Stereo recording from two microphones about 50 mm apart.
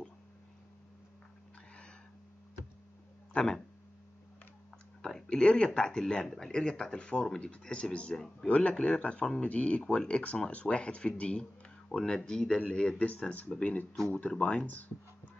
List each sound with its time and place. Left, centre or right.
5.0 s a sound: centre
5.7 s speech: centre
11.9 s speech: centre